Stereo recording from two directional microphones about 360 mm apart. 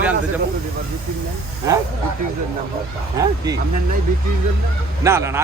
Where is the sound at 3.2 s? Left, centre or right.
Centre.